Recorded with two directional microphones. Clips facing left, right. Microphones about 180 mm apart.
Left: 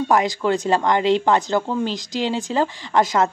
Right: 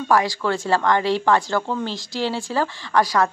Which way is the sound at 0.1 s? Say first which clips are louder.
Even; 20° left (ahead or behind).